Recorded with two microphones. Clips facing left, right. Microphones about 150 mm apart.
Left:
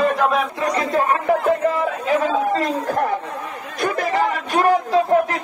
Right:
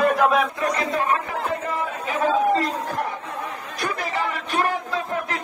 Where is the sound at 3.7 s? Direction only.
50° left (ahead or behind).